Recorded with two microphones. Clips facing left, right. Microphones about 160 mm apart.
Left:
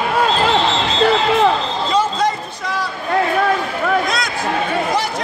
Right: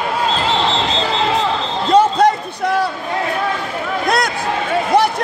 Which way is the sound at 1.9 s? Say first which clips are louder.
Right 7 dB; 60° right (ahead or behind).